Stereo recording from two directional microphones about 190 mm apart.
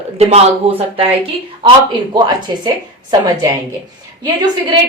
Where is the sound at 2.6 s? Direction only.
20° right (ahead or behind).